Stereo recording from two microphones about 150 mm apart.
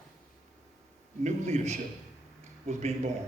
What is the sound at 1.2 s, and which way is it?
Speech, 50° right (ahead or behind).